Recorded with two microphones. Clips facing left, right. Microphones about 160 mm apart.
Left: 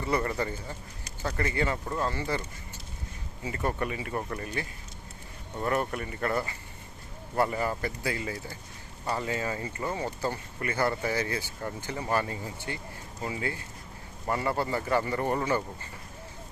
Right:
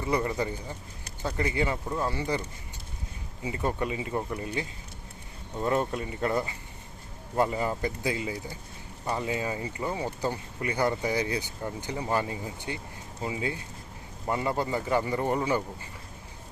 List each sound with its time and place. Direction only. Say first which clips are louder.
0.0 s speech: right 1 dB; 15° right (ahead or behind)
3.4 s speech: right 1 dB; 15° right (ahead or behind)
5.6 s speech: right 2 dB; 20° right (ahead or behind)